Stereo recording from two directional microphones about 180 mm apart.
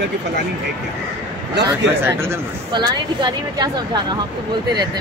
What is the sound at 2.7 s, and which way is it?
A woman's voice, 25° right (ahead or behind).